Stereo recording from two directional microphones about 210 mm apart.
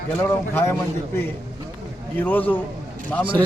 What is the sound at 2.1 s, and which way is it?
Speech, 10° left (ahead or behind).